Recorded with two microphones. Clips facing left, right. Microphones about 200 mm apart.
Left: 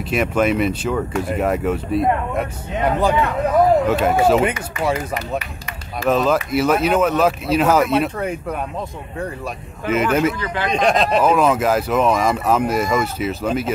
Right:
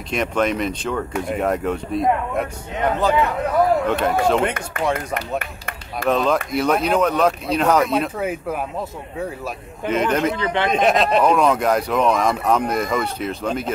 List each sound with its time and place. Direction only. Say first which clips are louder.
0.1 s speech: left 3 dB; 5° left (ahead or behind)
5.4 s run: even; 55° right (ahead or behind)
6.0 s speech: left 2 dB; 5° left (ahead or behind)
10.3 s speech: right 3 dB; 25° right (ahead or behind)
10.7 s speech: left 1 dB; centre (ahead or behind)